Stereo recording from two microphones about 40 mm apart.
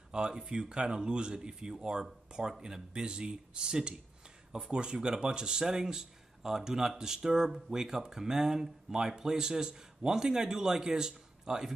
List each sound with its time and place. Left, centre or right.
0.3 s speech: centre